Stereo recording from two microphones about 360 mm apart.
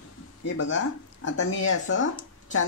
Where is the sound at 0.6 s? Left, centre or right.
Left.